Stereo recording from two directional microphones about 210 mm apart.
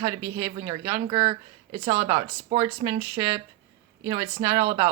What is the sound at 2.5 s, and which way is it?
Speech, 30° right (ahead or behind).